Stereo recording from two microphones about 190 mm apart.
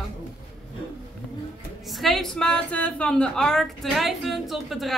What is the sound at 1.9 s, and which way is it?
Speech, centre (ahead or behind).